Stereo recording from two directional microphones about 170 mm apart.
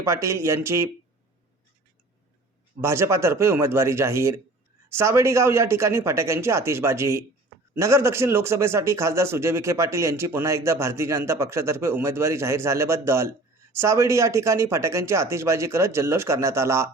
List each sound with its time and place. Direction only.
0.0 s a man's voice: 15° right (ahead or behind)
2.8 s a man's voice: 15° right (ahead or behind)